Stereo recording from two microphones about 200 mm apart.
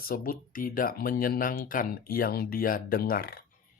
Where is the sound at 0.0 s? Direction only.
45° left (ahead or behind).